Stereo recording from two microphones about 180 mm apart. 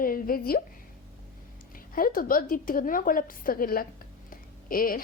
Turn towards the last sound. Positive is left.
turn(degrees=50)  # may be behind; listen again after turning